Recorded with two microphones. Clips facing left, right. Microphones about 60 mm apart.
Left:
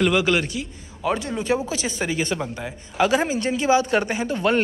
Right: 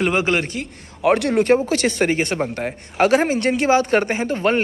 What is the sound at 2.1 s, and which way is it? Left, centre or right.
Speech, right.